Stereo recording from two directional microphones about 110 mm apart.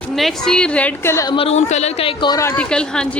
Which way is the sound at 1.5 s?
90° left.